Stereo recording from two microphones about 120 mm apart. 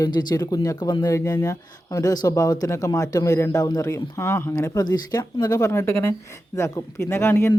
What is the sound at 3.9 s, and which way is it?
Speech, 25° left (ahead or behind).